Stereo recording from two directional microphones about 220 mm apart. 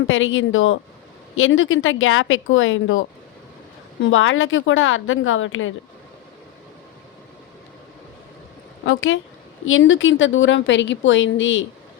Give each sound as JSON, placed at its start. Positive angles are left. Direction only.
{"t": 0.1, "sound": "a woman's voice", "side_deg": 60}
{"t": 4.0, "sound": "a woman's voice", "side_deg": 65}
{"t": 8.9, "sound": "a woman's voice", "side_deg": 65}